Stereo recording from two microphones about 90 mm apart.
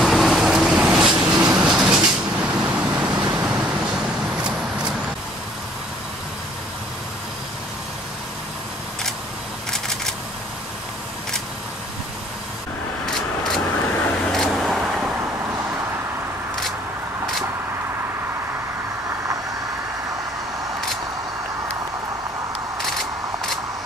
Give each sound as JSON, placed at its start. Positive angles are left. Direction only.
{"t": 0.0, "sound": "vehicle", "side_deg": 0}
{"t": 1.5, "sound": "train", "side_deg": -10}
{"t": 3.4, "sound": "vehicle", "side_deg": -10}
{"t": 9.7, "sound": "a sound", "side_deg": 5}
{"t": 13.0, "sound": "vehicle", "side_deg": 5}